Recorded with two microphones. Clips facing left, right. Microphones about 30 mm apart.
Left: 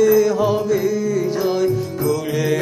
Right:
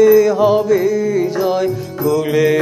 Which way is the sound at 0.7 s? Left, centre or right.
Centre.